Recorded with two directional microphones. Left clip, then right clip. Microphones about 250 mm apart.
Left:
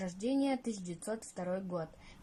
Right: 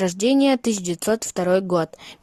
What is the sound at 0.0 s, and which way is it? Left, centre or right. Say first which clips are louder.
Speech: right 16 dB; right.